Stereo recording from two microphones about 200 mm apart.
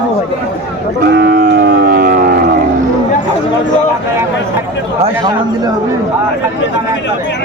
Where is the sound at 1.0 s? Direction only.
55° right (ahead or behind).